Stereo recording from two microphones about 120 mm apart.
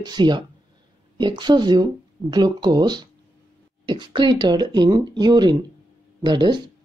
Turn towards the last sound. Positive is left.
turn(degrees=-40)  # may be behind; listen again after turning